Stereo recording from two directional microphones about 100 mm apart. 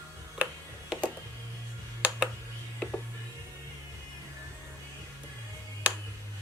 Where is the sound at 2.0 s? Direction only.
10° right (ahead or behind).